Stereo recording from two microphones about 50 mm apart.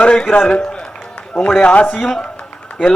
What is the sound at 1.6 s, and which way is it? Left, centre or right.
Speech, left.